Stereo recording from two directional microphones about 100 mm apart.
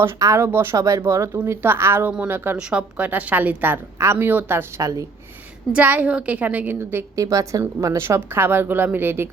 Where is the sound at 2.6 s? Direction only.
10° right (ahead or behind); by 5.0 s 35° right (ahead or behind).